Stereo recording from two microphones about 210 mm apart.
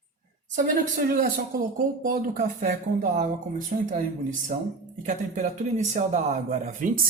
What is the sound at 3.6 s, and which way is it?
Speech, 35° right (ahead or behind).